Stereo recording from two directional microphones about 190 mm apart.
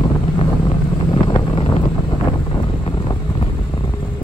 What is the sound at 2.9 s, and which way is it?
Vehicle, 25° left (ahead or behind).